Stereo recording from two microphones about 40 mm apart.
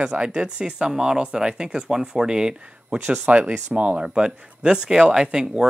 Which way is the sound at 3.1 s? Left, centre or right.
Right.